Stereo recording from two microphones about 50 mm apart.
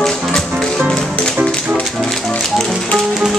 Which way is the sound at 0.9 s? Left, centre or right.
Centre.